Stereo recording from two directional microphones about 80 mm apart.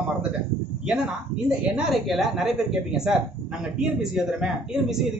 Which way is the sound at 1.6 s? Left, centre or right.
Centre.